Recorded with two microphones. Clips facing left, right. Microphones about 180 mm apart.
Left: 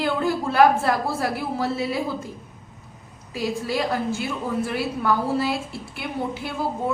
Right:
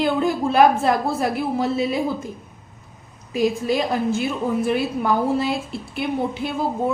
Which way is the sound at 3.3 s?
20° right (ahead or behind).